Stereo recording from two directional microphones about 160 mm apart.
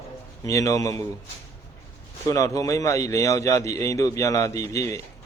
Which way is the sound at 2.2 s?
20° left (ahead or behind).